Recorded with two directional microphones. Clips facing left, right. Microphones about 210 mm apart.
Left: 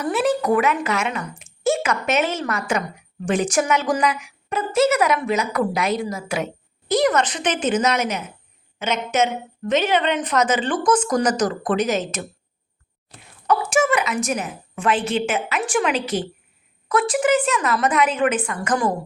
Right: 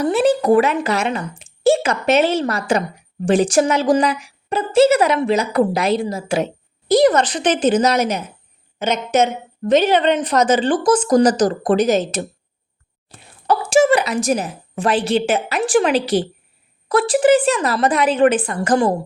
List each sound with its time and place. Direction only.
0.0 s a woman's voice: 30° right (ahead or behind)
13.5 s a woman's voice: 30° right (ahead or behind)